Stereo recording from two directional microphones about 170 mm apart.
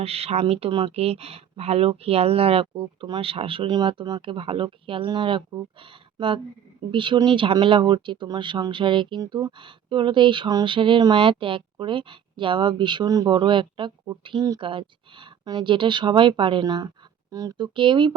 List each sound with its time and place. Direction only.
0.0 s speech: 35° right (ahead or behind)